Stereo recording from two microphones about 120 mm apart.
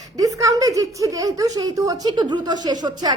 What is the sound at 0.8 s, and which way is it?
Giggle, 30° right (ahead or behind).